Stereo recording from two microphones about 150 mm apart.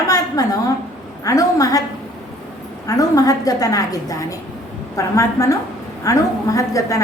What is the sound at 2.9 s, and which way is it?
A woman's voice, 25° left (ahead or behind).